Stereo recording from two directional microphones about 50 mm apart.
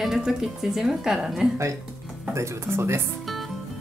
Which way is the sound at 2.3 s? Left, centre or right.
Right.